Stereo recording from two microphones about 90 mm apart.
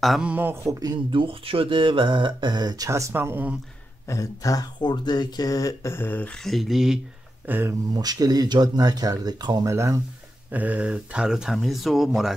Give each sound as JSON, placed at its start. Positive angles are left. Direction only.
{"t": 0.2, "sound": "speech", "side_deg": -20}
{"t": 0.7, "sound": "speech", "side_deg": -45}
{"t": 1.1, "sound": "speech", "side_deg": -90}
{"t": 2.9, "sound": "speech", "side_deg": -30}
{"t": 4.1, "sound": "speech", "side_deg": 40}
{"t": 4.8, "sound": "speech", "side_deg": 55}
{"t": 6.4, "sound": "speech", "side_deg": 0}
{"t": 7.4, "sound": "speech", "side_deg": -20}
{"t": 7.9, "sound": "speech", "side_deg": -50}
{"t": 9.7, "sound": "speech", "side_deg": -35}
{"t": 10.5, "sound": "speech", "side_deg": -15}